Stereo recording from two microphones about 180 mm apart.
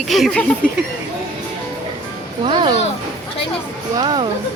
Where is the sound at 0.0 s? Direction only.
Centre (ahead or behind).